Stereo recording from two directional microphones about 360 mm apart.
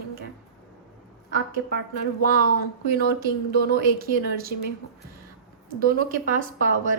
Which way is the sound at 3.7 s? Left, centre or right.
Right.